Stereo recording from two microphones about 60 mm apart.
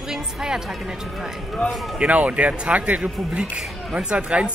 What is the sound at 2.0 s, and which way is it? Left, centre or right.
Speech, right.